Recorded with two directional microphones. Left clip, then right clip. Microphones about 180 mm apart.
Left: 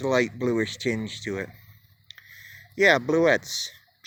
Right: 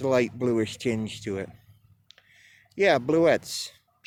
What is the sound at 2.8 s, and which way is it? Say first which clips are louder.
Speech: left 1 dB; 15° right (ahead or behind).